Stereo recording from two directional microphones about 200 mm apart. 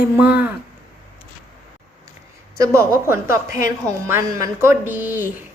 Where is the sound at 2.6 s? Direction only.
15° right (ahead or behind).